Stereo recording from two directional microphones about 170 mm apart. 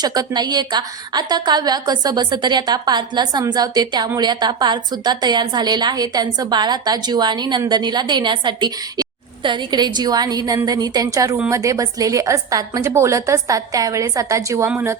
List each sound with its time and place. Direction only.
0.0 s a woman's voice: 25° right (ahead or behind)